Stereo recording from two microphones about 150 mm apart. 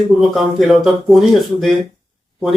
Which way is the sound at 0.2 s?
Centre (ahead or behind).